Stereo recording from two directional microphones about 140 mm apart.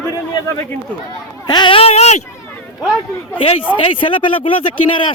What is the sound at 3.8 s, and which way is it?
Speech, 40° left (ahead or behind).